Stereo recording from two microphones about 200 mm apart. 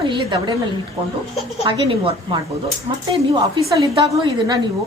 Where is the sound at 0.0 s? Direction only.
25° right (ahead or behind).